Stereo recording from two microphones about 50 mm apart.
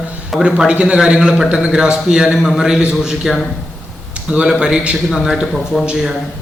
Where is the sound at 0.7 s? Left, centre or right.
Right.